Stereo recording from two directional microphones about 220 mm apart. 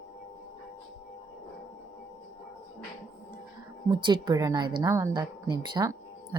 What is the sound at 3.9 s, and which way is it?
A woman's voice, 20° right (ahead or behind).